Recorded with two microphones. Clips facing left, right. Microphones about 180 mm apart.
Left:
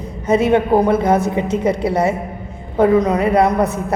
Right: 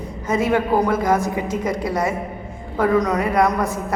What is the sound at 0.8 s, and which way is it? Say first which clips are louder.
A woman's voice: left 4 dB; 25° left (ahead or behind).